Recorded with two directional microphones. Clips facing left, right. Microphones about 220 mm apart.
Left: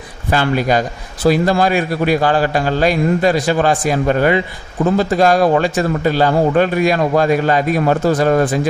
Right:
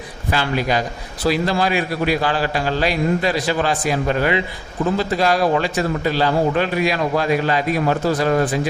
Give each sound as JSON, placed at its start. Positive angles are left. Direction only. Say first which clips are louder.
{"t": 0.3, "sound": "a man's voice", "louder": "left 5 dB", "side_deg": 45}